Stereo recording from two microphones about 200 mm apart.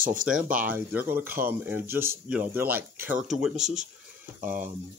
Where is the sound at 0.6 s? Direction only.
10° right (ahead or behind).